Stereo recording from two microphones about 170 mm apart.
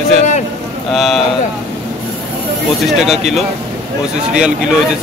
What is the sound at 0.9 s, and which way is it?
Speech, centre (ahead or behind).